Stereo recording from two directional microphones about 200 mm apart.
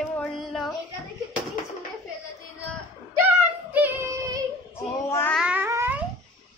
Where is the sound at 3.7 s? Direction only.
10° right (ahead or behind).